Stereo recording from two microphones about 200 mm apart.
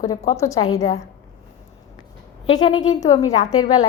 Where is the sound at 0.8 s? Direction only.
35° left (ahead or behind).